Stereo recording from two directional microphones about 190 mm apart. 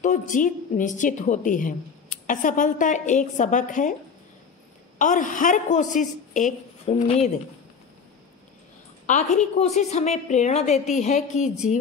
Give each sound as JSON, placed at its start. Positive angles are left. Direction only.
{"t": 0.0, "sound": "a woman's voice", "side_deg": 40}
{"t": 4.9, "sound": "a woman's voice", "side_deg": 45}
{"t": 9.0, "sound": "a woman's voice", "side_deg": 40}